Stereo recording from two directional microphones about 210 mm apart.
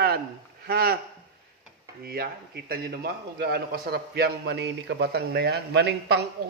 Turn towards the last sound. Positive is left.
turn(degrees=-55)  # may be behind; listen again after turning